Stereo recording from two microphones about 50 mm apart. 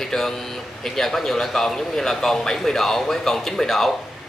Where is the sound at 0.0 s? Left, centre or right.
Centre.